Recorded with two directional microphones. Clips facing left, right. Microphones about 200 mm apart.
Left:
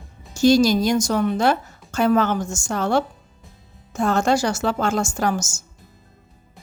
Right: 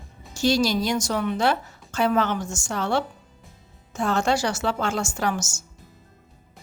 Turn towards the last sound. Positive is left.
turn(degrees=45)  # may be behind; listen again after turning